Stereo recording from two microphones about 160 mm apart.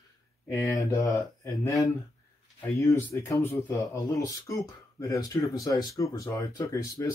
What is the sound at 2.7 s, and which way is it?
Speech, 20° left (ahead or behind).